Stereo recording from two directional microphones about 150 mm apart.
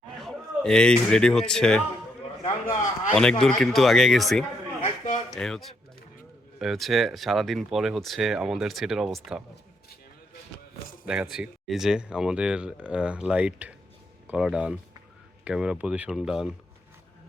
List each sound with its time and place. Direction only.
0.2 s speech: 5° left (ahead or behind)
2.7 s a sound: 55° left (ahead or behind)
3.6 s speech: centre (ahead or behind)
4.8 s a sound: 50° left (ahead or behind)
5.3 s speech: centre (ahead or behind)
11.0 s speech: 5° right (ahead or behind)